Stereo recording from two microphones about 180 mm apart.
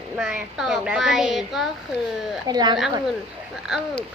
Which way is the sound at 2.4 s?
20° right (ahead or behind).